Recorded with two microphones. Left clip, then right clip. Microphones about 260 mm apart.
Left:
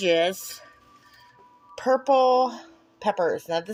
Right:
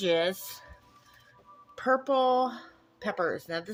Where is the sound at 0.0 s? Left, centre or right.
Centre.